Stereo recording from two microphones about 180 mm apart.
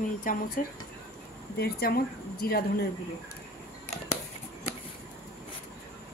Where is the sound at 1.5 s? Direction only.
60° left (ahead or behind).